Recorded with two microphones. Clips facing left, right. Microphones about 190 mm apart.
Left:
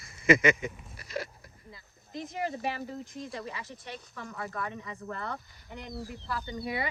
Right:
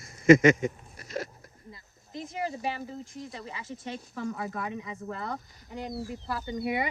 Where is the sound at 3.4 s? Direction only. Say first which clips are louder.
Right 1 dB; 25° right (ahead or behind).